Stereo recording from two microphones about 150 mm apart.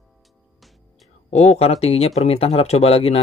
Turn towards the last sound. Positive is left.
turn(degrees=40)  # may be behind; listen again after turning